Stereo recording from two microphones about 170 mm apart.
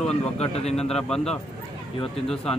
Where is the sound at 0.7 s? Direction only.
5° left (ahead or behind).